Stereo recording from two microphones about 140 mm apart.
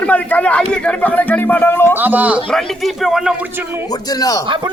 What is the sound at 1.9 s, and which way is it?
Speech, 15° right (ahead or behind).